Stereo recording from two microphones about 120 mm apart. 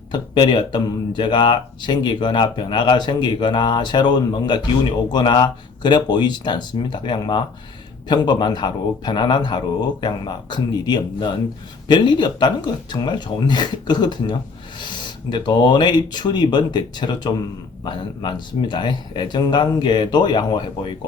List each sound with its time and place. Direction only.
0.1 s speech: 35° left (ahead or behind)